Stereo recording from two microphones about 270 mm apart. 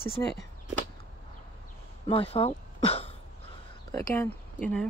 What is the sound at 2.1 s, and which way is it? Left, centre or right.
Speech, left.